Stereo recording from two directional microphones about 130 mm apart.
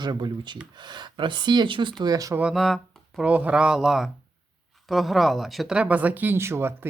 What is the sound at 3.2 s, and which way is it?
Speech, 10° right (ahead or behind).